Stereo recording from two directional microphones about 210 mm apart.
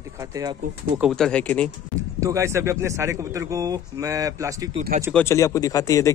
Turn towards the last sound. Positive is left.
turn(degrees=15)  # may be behind; listen again after turning